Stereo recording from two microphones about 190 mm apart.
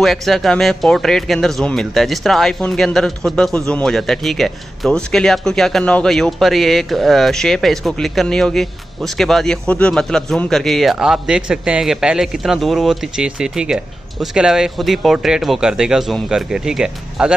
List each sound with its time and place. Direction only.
0.0 s speech: centre (ahead or behind)